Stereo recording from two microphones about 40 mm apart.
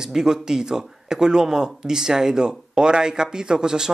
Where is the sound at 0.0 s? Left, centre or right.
Centre.